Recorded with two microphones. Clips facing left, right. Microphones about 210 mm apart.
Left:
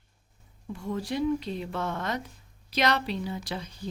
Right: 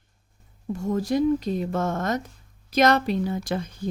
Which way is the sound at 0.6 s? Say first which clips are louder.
Right 7 dB; 45° right (ahead or behind).